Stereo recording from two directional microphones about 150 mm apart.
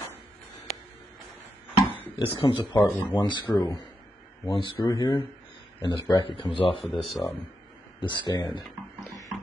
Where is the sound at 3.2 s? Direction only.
30° left (ahead or behind).